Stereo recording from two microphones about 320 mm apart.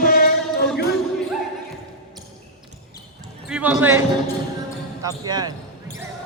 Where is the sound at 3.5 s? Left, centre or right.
Centre.